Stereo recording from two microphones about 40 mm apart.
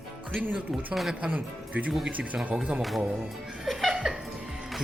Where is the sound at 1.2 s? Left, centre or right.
Right.